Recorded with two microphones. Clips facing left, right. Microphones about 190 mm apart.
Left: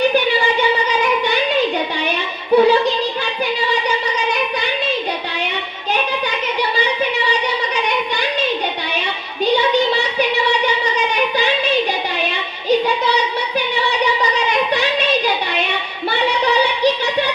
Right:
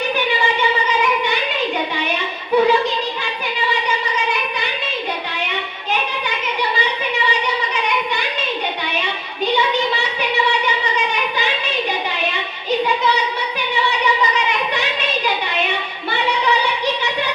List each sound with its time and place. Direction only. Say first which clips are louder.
2.5 s music: left 3 dB; 35° left (ahead or behind)